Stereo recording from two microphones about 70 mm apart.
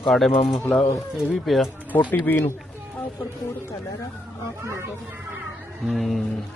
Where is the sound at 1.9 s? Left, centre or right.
Left.